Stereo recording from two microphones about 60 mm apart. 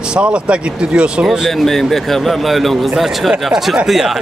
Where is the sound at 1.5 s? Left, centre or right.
Centre.